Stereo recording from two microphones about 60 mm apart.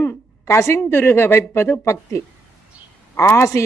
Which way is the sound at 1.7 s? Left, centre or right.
Left.